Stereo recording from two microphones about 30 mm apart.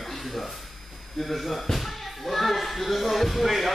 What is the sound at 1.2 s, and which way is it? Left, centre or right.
Speech, centre.